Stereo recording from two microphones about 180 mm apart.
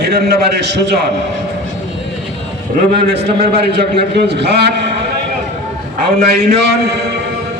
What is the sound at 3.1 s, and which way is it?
A man's voice, 65° right (ahead or behind).